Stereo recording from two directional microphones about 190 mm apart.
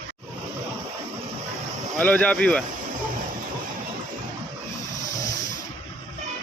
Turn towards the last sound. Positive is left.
turn(degrees=40)  # may be behind; listen again after turning